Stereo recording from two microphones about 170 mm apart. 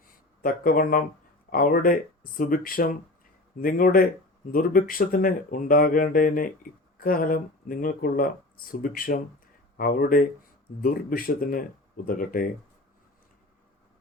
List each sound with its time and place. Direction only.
0.4 s speech: 55° left (ahead or behind)